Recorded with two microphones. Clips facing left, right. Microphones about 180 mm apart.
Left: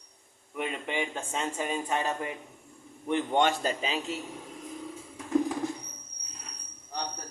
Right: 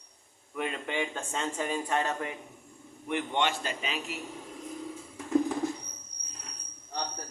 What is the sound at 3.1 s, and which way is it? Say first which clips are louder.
Speech: left 4 dB; 35° left (ahead or behind).